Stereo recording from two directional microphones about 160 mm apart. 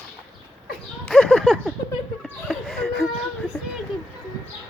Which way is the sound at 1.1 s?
Centre (ahead or behind).